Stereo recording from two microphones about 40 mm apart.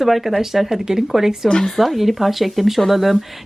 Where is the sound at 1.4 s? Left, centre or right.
Centre.